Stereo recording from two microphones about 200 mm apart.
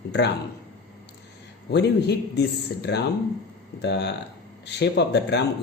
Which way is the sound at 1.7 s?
55° left (ahead or behind).